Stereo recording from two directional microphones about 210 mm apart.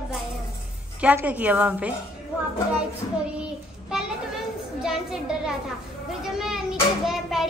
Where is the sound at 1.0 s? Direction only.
5° right (ahead or behind).